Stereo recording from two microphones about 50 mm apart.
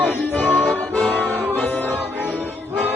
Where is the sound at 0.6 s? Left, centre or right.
Left.